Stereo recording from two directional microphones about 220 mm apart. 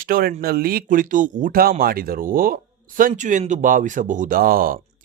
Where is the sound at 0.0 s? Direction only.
40° right (ahead or behind).